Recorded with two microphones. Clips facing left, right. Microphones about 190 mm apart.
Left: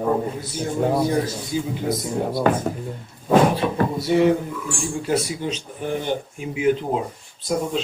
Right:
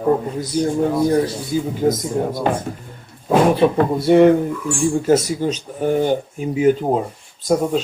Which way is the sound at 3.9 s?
55° right (ahead or behind).